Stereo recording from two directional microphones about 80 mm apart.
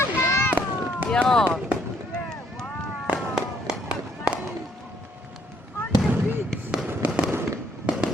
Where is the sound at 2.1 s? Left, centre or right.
Centre.